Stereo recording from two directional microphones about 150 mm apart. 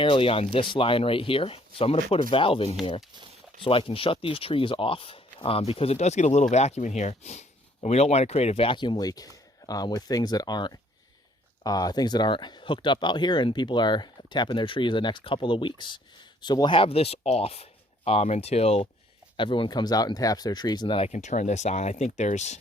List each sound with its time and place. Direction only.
0.0 s speech: 35° left (ahead or behind)
19.4 s speech: 35° left (ahead or behind)
21.1 s speech: 55° left (ahead or behind)